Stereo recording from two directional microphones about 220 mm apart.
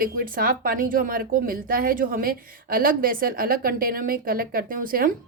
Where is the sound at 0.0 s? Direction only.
40° right (ahead or behind).